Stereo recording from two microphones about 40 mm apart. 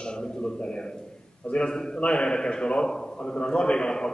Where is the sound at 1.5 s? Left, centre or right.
Left.